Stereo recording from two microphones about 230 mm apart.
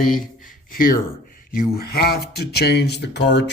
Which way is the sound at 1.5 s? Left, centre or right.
Left.